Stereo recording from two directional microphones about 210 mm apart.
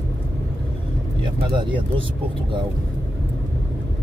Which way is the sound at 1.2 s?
20° right (ahead or behind).